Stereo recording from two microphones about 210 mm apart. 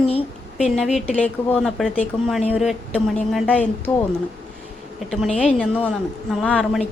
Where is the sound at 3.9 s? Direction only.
20° left (ahead or behind).